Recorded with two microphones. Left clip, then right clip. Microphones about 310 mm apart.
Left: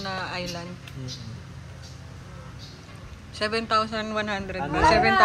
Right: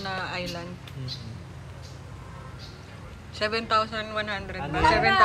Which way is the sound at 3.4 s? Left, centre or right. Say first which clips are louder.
Left 1 dB; centre.